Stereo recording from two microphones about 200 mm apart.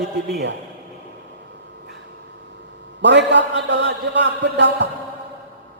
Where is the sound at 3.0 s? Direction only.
60° right (ahead or behind).